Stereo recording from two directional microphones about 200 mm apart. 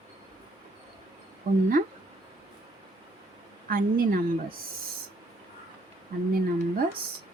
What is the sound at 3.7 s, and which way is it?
Speech, 45° right (ahead or behind).